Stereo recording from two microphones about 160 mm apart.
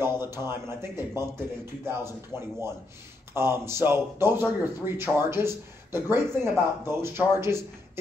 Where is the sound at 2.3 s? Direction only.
15° right (ahead or behind).